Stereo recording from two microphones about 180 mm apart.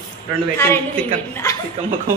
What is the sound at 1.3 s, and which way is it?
Speech, 15° left (ahead or behind).